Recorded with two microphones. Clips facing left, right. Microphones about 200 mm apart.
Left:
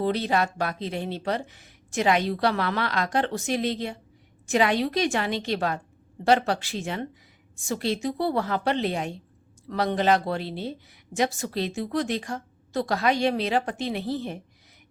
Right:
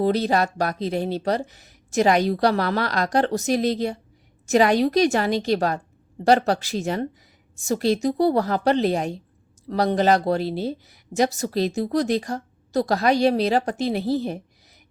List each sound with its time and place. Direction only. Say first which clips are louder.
0.0 s speech: right 4 dB; 40° right (ahead or behind)